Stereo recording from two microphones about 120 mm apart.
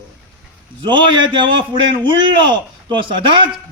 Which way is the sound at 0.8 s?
45° right (ahead or behind).